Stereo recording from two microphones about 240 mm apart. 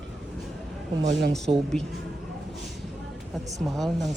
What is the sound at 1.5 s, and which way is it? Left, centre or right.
Speech, right.